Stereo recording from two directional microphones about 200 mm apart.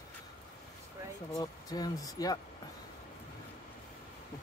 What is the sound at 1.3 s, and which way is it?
Speech, 20° left (ahead or behind).